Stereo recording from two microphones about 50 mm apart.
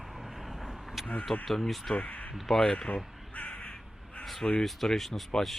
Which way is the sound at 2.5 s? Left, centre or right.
Centre.